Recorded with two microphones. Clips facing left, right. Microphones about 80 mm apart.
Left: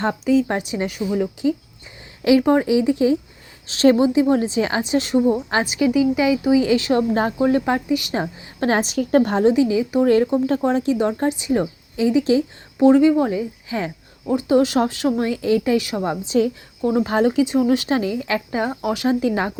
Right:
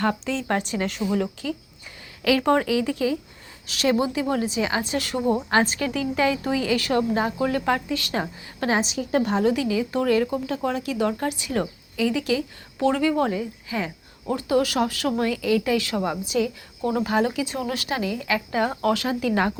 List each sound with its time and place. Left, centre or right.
0.0 s a woman's voice: centre; by 4.8 s left
4.8 s a woman's voice: left
7.1 s speech: left
7.3 s a woman's voice: centre
8.7 s a woman's voice: left
9.4 s a woman's voice: left
10.3 s a woman's voice: left; by 13.4 s centre
13.7 s speech: left
14.3 s a woman's voice: left